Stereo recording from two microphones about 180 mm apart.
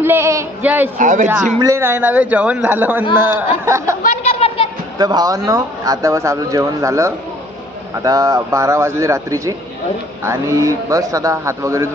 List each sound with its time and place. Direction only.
0.0 s speech: 15° right (ahead or behind)
0.9 s a man's voice: 45° right (ahead or behind)
1.6 s speech: 15° right (ahead or behind)
4.0 s chatter: 40° left (ahead or behind)
4.9 s speech: 20° right (ahead or behind)